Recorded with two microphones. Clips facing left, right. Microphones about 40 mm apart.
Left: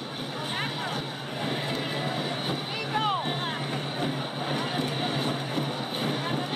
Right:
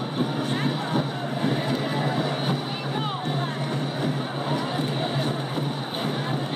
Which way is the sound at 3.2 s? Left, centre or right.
Left.